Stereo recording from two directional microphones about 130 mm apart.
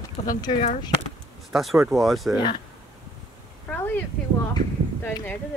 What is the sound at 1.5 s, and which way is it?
Speech, centre (ahead or behind).